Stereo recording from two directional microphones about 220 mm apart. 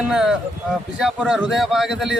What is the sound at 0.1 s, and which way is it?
A man's voice, centre (ahead or behind).